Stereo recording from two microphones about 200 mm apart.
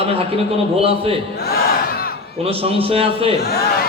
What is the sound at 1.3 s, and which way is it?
Battle cry, 50° left (ahead or behind).